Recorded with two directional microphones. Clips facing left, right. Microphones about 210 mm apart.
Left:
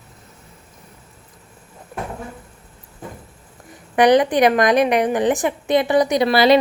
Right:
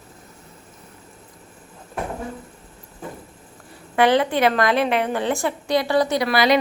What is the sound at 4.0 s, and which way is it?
A woman's voice, 15° left (ahead or behind).